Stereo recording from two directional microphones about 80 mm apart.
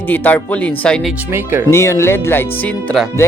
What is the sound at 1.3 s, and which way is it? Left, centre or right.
Speech, right.